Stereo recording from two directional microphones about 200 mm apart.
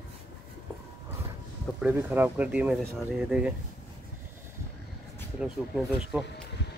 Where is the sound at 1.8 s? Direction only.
10° right (ahead or behind).